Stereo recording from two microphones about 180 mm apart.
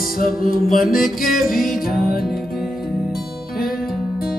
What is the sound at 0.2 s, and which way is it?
Music, 50° left (ahead or behind).